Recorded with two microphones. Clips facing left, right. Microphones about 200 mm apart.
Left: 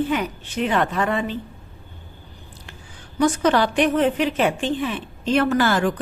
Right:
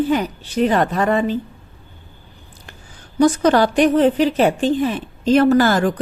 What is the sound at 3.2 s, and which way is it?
A woman's voice, 40° right (ahead or behind).